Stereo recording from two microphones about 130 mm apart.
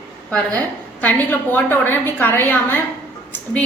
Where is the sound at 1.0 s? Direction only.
15° left (ahead or behind).